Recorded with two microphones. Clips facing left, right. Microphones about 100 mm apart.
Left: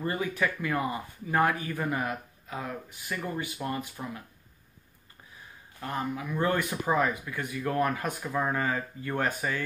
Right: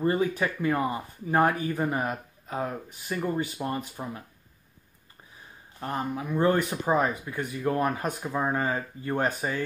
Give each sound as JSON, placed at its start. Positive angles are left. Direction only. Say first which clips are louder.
{"t": 0.0, "sound": "speech", "louder": "right 4 dB", "side_deg": -30}
{"t": 5.8, "sound": "speech", "louder": "right 2 dB", "side_deg": -30}